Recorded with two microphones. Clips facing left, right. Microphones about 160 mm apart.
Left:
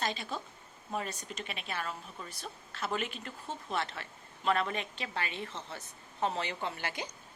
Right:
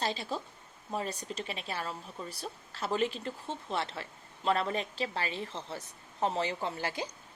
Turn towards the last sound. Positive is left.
turn(degrees=-30)  # may be behind; listen again after turning